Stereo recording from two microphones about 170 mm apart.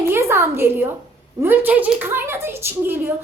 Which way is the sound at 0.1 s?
15° right (ahead or behind).